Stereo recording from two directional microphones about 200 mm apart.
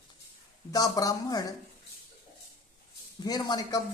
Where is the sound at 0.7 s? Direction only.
20° left (ahead or behind).